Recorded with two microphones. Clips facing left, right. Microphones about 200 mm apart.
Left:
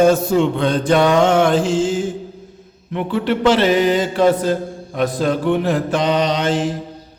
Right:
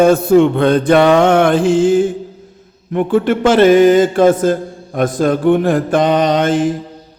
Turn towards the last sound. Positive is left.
turn(degrees=-50)  # may be behind; listen again after turning